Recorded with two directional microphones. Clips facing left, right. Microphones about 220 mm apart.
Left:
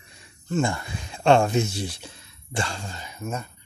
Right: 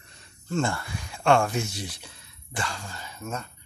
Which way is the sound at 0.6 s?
20° left (ahead or behind).